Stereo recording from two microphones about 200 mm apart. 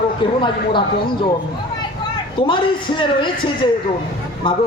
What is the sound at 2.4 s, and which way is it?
A man's voice, 25° left (ahead or behind).